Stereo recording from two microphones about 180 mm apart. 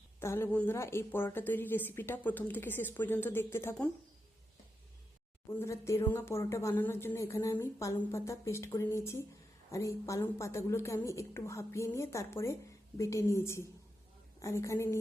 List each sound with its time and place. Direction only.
0.2 s a woman's voice: 15° left (ahead or behind)
5.5 s a woman's voice: 15° left (ahead or behind)